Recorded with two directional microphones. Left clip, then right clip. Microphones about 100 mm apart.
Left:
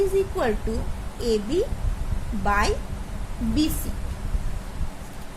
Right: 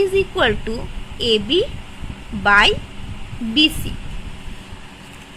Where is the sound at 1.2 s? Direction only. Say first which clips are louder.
Right 7 dB; 90° right.